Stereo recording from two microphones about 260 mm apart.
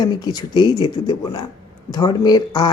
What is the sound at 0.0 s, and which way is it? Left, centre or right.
Speech, centre.